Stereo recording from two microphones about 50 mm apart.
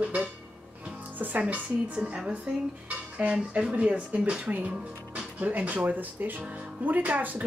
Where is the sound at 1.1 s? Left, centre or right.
Right.